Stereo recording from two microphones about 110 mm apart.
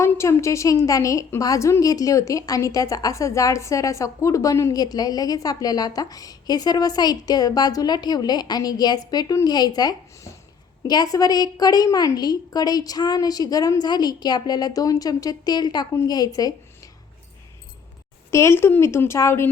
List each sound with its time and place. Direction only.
0.0 s a woman's voice: 25° left (ahead or behind)
18.3 s a woman's voice: 25° left (ahead or behind)